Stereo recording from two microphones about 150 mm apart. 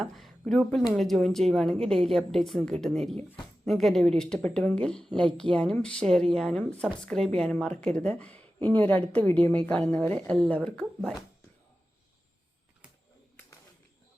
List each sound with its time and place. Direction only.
0.0 s a woman's voice: centre (ahead or behind)